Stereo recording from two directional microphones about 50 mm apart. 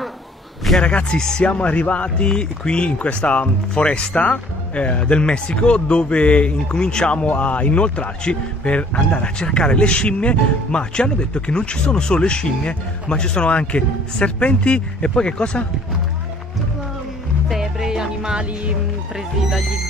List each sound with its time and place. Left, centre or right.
0.7 s speech: centre
17.5 s music: centre